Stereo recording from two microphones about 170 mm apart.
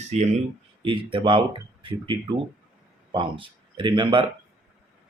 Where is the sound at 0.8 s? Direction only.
30° right (ahead or behind).